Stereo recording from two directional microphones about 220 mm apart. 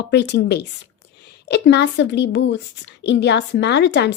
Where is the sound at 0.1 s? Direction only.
50° left (ahead or behind).